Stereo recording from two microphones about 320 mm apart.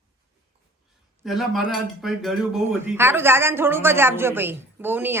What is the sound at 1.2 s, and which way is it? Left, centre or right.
Speech, centre.